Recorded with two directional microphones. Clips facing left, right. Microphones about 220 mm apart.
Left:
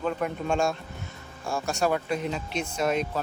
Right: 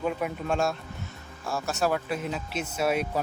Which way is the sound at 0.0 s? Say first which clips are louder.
Left 1 dB; 5° right (ahead or behind).